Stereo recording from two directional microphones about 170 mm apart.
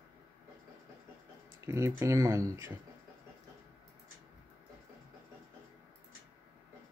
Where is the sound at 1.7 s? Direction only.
15° right (ahead or behind).